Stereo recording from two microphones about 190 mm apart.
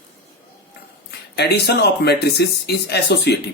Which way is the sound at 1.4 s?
60° left (ahead or behind).